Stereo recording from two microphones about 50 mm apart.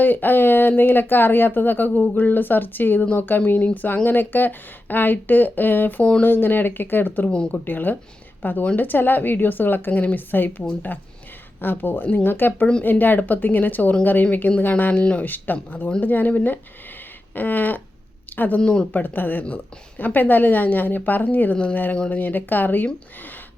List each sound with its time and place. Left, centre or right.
0.0 s speech: left
6.0 s speech: left
6.2 s speech: left
7.3 s speech: centre
7.5 s a woman's voice: left
18.6 s speech: centre
18.9 s speech: left
21.5 s speech: left
22.1 s speech: left